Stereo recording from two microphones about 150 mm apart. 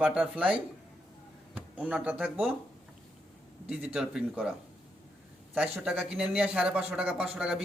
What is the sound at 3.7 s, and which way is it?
Speech, 5° right (ahead or behind).